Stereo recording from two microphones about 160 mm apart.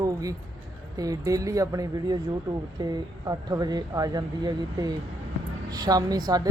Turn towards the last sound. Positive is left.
turn(degrees=-25)  # may be behind; listen again after turning